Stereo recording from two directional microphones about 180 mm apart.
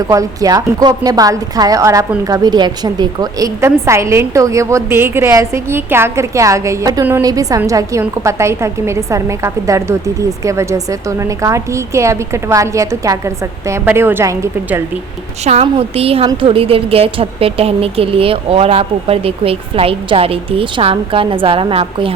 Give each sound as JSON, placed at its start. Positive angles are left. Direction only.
{"t": 0.1, "sound": "a woman's voice", "side_deg": -20}
{"t": 15.4, "sound": "a woman's voice", "side_deg": -35}